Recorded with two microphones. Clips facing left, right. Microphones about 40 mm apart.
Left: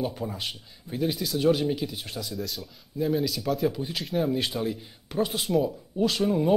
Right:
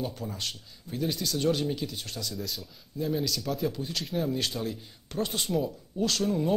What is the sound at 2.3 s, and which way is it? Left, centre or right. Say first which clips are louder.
A man's voice: left 3 dB; centre.